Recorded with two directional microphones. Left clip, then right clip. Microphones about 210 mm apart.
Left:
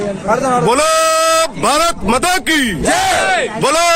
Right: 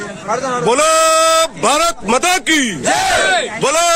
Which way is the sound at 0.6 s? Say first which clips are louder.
Right 3 dB; 5° right (ahead or behind).